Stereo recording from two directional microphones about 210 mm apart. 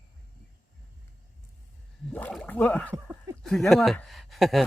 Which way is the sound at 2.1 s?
5° left (ahead or behind).